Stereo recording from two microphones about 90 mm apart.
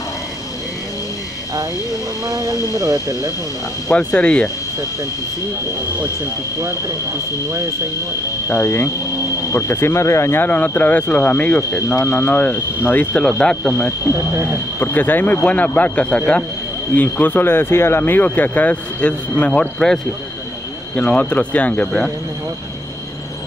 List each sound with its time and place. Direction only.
2.2 s speech: 40° right (ahead or behind)
3.9 s speech: 10° left (ahead or behind)
8.5 s speech: 30° left (ahead or behind)
14.0 s speech: 30° right (ahead or behind)
14.8 s speech: 20° left (ahead or behind)